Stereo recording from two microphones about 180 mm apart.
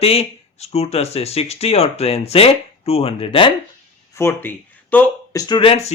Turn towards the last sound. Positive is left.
turn(degrees=35)  # may be behind; listen again after turning